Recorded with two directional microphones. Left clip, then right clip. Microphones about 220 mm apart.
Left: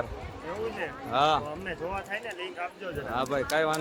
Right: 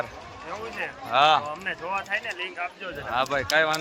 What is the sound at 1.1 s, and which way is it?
Speech, centre (ahead or behind).